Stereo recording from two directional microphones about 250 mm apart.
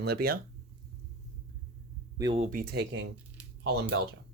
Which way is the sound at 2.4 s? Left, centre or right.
Right.